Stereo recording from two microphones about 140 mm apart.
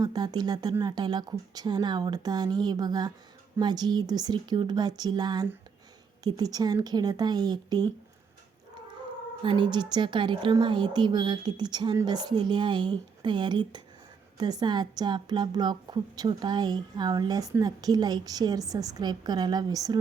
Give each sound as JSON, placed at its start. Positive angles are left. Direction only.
{"t": 0.0, "sound": "a woman's voice", "side_deg": -30}
{"t": 9.4, "sound": "a woman's voice", "side_deg": -35}